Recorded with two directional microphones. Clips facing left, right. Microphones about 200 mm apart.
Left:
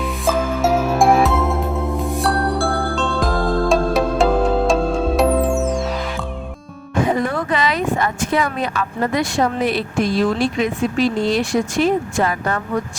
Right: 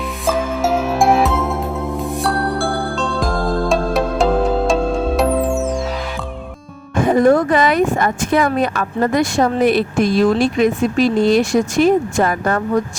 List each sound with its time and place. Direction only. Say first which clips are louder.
0.3 s music: even; centre (ahead or behind)
6.9 s speech: right 7 dB; 50° right (ahead or behind)